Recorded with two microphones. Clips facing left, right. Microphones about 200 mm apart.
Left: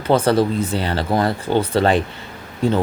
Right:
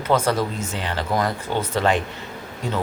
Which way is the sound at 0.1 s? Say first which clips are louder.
Left 5 dB; 30° left (ahead or behind).